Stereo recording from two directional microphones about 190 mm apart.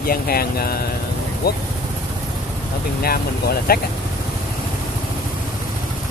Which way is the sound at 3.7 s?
55° left (ahead or behind).